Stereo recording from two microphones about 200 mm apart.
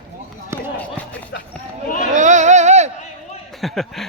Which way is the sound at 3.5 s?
Centre (ahead or behind).